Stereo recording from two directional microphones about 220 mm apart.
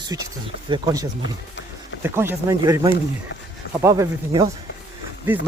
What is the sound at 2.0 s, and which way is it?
Speech, 10° right (ahead or behind).